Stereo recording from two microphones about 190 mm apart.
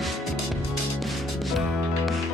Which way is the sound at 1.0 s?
Centre (ahead or behind).